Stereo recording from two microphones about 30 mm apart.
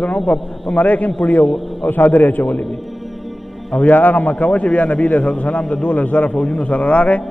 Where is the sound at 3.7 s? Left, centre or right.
Left.